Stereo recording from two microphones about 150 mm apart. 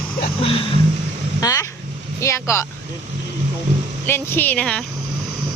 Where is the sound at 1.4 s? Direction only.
25° left (ahead or behind).